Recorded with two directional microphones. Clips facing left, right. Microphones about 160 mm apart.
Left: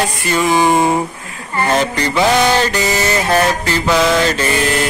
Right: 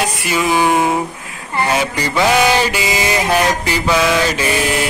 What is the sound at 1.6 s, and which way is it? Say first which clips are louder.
Mantra: left 3 dB; 10° right (ahead or behind).